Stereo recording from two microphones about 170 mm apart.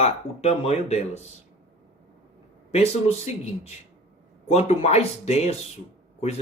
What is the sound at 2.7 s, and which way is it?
Speech, 40° left (ahead or behind).